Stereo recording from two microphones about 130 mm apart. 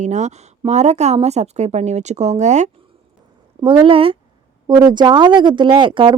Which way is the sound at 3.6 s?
40° right (ahead or behind).